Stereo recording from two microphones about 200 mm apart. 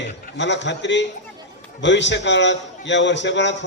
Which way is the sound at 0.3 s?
60° left (ahead or behind).